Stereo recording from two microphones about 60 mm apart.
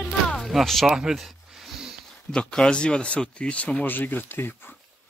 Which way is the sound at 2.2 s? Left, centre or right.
Centre.